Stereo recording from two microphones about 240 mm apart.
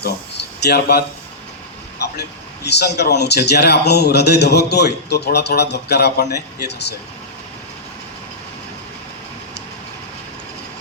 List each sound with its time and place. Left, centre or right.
0.0 s speech: left
2.6 s speech: left